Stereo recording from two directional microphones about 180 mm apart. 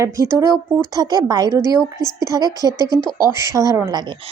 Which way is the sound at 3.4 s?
20° right (ahead or behind).